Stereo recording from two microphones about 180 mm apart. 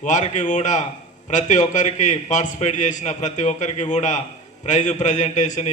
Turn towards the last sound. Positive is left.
turn(degrees=40)  # may be behind; listen again after turning